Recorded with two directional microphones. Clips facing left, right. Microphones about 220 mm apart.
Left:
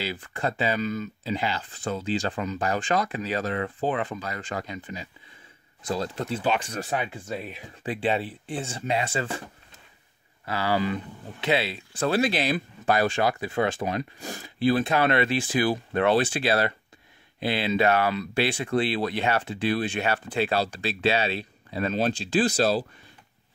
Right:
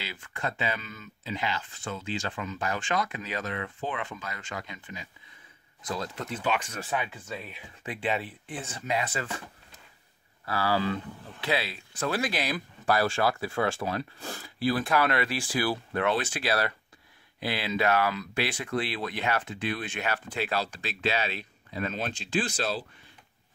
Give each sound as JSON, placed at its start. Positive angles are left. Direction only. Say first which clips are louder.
{"t": 0.0, "sound": "speech", "louder": "left 6 dB", "side_deg": 35}
{"t": 10.4, "sound": "speech", "louder": "left 2 dB", "side_deg": 20}